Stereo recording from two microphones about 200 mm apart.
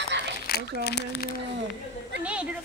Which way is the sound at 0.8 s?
55° left (ahead or behind).